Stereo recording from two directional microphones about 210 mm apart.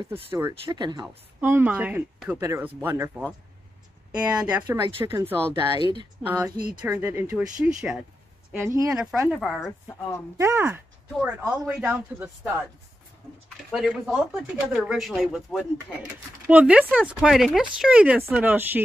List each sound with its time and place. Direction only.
0.3 s speech: 15° right (ahead or behind)
4.1 s speech: 5° right (ahead or behind)
4.8 s speech: 25° right (ahead or behind); by 8.0 s 5° right (ahead or behind)
8.6 s speech: 15° right (ahead or behind)
8.9 s a woman's voice: 5° right (ahead or behind)
10.3 s speech: 15° right (ahead or behind)
13.7 s speech: centre (ahead or behind)